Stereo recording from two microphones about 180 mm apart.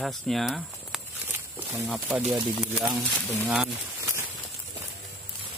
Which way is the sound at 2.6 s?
5° right (ahead or behind).